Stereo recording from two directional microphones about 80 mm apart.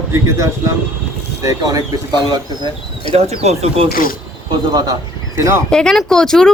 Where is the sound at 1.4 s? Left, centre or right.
Right.